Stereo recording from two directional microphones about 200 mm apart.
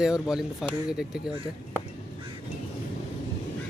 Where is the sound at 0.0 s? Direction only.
5° right (ahead or behind).